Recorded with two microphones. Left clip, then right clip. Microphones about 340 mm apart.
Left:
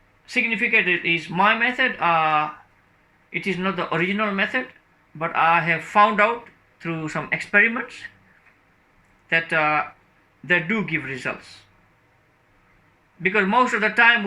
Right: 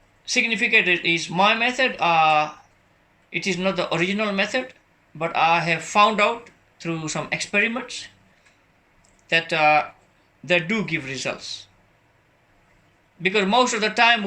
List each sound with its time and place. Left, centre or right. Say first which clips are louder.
0.3 s speech: right 1 dB; centre
9.3 s speech: right 2 dB; centre
13.2 s speech: even; centre